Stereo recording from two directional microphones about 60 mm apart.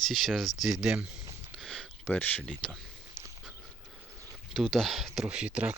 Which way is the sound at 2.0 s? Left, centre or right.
Left.